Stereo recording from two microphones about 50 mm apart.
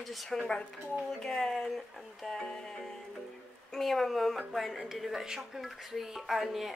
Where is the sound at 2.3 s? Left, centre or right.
Centre.